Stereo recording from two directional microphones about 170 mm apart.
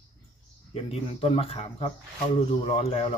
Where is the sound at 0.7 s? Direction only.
35° left (ahead or behind).